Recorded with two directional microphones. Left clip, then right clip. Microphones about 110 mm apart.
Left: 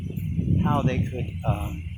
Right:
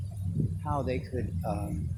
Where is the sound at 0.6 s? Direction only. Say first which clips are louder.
Left 5 dB; 10° right (ahead or behind).